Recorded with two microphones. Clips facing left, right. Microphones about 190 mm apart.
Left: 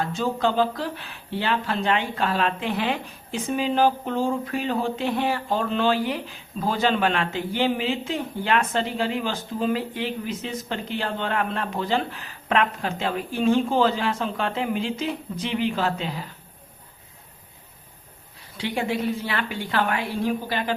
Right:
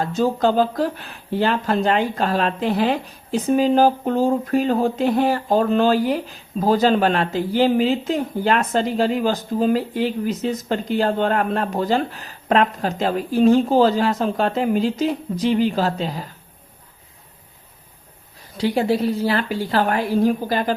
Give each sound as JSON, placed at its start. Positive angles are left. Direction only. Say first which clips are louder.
{"t": 0.0, "sound": "speech", "louder": "right 5 dB", "side_deg": -40}
{"t": 18.5, "sound": "speech", "louder": "right 7 dB", "side_deg": -35}